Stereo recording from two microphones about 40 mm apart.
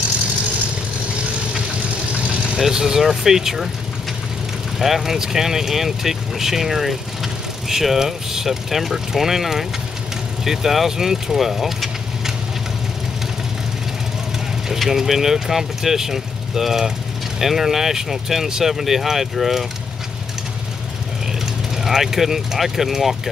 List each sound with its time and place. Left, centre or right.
1.9 s vehicle: right
2.6 s speech: centre
4.7 s speech: centre
14.8 s speech: centre
21.8 s speech: centre